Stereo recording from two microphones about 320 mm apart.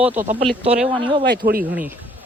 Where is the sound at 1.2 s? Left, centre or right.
Right.